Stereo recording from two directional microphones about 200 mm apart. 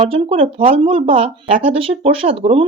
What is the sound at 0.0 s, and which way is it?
Speech, 30° right (ahead or behind).